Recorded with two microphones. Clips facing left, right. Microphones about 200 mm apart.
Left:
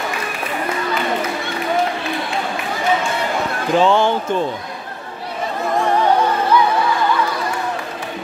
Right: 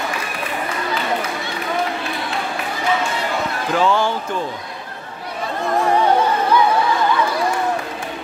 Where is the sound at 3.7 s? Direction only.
25° left (ahead or behind).